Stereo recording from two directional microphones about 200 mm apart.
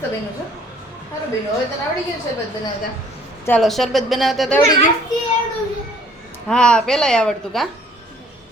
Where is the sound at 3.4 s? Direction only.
5° left (ahead or behind).